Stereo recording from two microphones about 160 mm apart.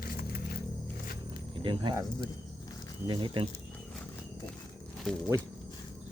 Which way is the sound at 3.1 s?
30° right (ahead or behind).